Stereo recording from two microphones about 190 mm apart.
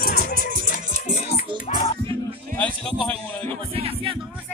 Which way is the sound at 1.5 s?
25° right (ahead or behind).